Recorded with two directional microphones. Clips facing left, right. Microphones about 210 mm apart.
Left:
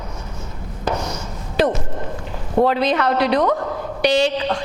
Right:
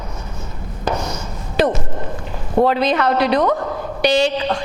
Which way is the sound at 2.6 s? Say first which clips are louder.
Right 2 dB; 10° right (ahead or behind).